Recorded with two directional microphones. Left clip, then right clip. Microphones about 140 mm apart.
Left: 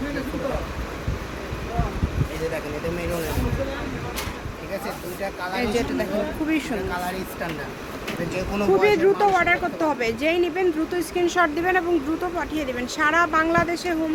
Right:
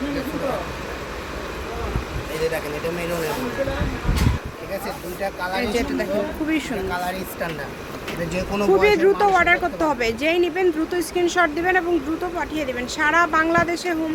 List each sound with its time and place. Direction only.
5.5 s speech: 10° left (ahead or behind)
8.3 s speech: 25° right (ahead or behind)
9.0 s speech: 5° right (ahead or behind)